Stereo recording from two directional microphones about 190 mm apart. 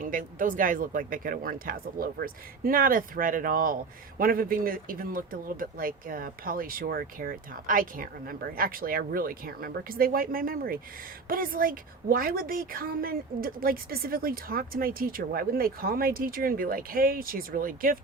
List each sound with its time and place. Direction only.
0.0 s a woman's voice: 45° right (ahead or behind)